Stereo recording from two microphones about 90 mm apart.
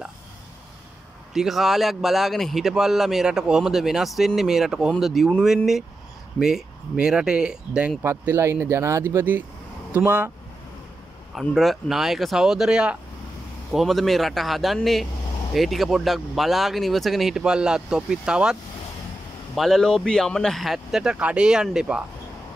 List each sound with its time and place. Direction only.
1.3 s speech: 5° right (ahead or behind)
6.4 s speech: 5° right (ahead or behind)
8.0 s speech: 25° right (ahead or behind)
11.3 s speech: centre (ahead or behind)
19.5 s speech: 5° left (ahead or behind)